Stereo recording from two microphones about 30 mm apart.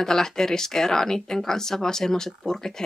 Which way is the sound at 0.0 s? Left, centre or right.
Centre.